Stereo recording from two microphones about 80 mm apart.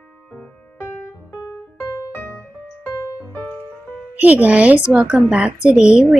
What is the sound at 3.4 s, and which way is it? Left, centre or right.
Music, left.